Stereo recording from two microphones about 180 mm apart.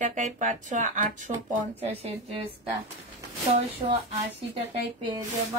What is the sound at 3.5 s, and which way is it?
Speech, 30° right (ahead or behind).